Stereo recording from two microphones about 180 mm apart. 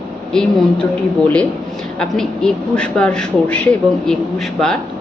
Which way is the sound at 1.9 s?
5° left (ahead or behind).